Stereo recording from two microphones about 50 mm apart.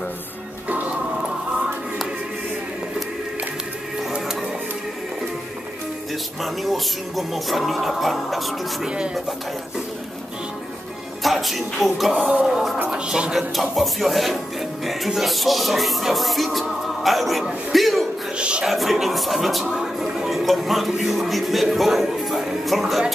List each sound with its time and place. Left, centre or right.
6.4 s speech: centre
8.8 s speech: centre
11.2 s speech: centre
12.9 s speech: centre
13.3 s speech: centre
17.7 s a sound: centre
18.6 s speech: centre